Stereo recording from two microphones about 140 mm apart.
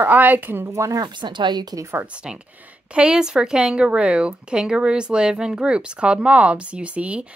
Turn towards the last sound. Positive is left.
turn(degrees=-10)  # may be behind; listen again after turning